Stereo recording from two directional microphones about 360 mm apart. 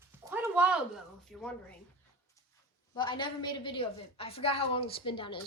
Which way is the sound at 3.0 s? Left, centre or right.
Centre.